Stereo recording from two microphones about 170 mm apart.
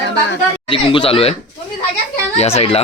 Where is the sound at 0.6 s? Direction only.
30° left (ahead or behind).